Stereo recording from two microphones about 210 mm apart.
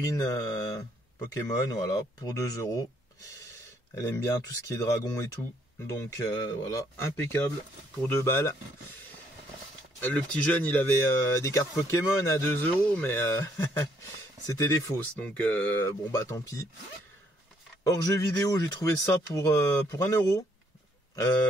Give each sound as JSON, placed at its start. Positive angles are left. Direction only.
{"t": 0.0, "sound": "speech", "side_deg": 15}
{"t": 3.9, "sound": "speech", "side_deg": 15}
{"t": 9.9, "sound": "speech", "side_deg": 10}
{"t": 17.8, "sound": "speech", "side_deg": 15}